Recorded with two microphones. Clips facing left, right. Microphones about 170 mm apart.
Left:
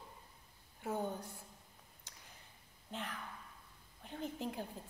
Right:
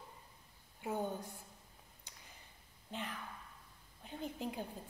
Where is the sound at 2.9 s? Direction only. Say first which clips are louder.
Right 1 dB; centre (ahead or behind).